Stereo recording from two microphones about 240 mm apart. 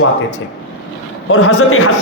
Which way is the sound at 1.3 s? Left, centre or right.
Left.